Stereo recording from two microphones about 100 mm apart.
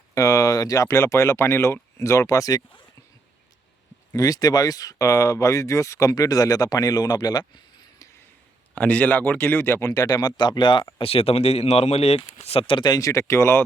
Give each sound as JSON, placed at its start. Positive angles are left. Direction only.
{"t": 0.1, "sound": "speech", "side_deg": 35}
{"t": 4.1, "sound": "speech", "side_deg": 40}
{"t": 8.7, "sound": "speech", "side_deg": 15}
{"t": 10.9, "sound": "speech", "side_deg": 70}
{"t": 12.8, "sound": "speech", "side_deg": 40}